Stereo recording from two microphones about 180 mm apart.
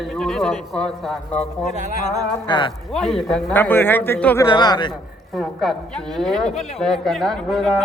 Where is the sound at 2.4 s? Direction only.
25° left (ahead or behind).